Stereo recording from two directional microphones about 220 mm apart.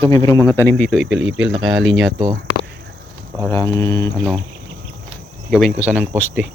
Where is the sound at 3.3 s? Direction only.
10° left (ahead or behind).